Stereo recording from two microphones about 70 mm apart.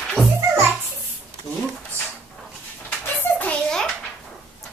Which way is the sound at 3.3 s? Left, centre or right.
Left.